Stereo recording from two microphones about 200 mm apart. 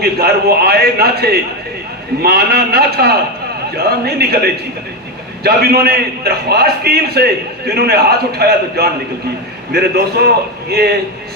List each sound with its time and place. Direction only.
0.0 s a man's voice: 50° right (ahead or behind)